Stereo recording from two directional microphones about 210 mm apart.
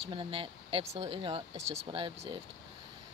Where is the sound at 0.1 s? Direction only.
25° right (ahead or behind).